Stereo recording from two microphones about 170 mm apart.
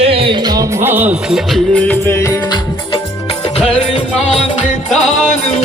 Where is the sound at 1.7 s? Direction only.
10° left (ahead or behind).